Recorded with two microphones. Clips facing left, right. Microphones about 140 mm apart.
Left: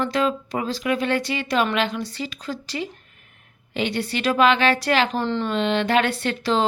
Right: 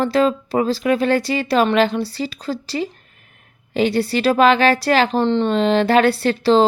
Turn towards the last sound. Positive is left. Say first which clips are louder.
# right 7 dB
turn(degrees=-35)  # may be behind; listen again after turning